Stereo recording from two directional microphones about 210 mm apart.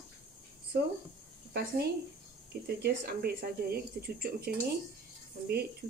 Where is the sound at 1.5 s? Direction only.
50° right (ahead or behind).